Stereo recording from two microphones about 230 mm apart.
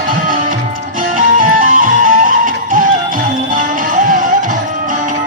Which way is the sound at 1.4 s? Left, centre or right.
Right.